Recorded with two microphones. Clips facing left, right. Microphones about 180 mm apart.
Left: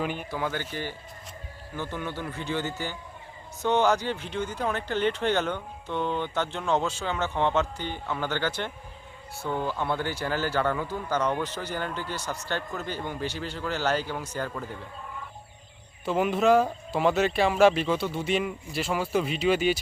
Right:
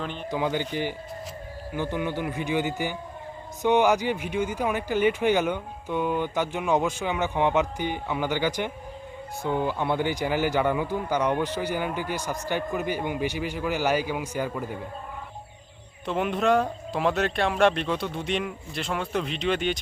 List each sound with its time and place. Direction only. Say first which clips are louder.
0.0 s speech: left 2 dB; 10° left (ahead or behind)
0.3 s speech: right 4 dB; 15° right (ahead or behind)
16.0 s speech: left 2 dB; 5° left (ahead or behind)